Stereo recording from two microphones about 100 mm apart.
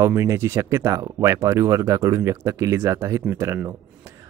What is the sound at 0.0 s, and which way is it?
Speech, 30° right (ahead or behind).